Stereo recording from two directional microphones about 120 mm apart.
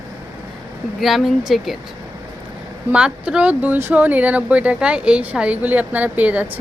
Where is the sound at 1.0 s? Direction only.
Centre (ahead or behind).